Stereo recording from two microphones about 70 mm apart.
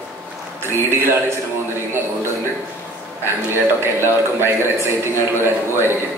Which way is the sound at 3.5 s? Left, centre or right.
Right.